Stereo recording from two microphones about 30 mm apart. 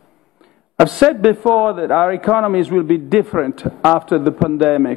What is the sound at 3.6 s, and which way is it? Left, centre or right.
Speech, centre.